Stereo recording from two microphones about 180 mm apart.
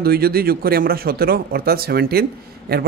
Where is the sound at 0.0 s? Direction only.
60° right (ahead or behind).